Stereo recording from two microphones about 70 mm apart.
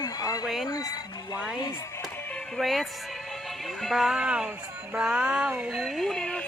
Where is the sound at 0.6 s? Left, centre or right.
Left.